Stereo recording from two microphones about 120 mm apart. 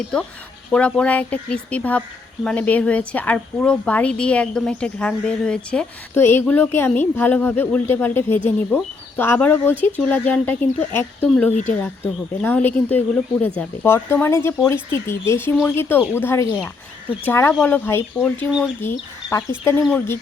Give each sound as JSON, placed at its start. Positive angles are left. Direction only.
{"t": 0.7, "sound": "speech", "side_deg": 10}
{"t": 6.1, "sound": "speech", "side_deg": 20}